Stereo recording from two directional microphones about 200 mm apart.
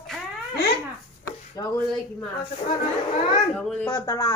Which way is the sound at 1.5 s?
20° left (ahead or behind).